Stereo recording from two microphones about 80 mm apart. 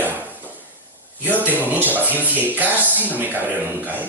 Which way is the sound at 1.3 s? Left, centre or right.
Right.